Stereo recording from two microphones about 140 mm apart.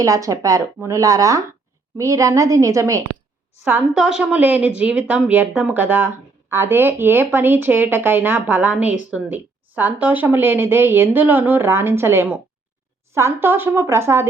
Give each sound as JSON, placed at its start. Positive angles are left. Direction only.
{"t": 0.0, "sound": "speech", "side_deg": -25}
{"t": 3.9, "sound": "speech", "side_deg": -5}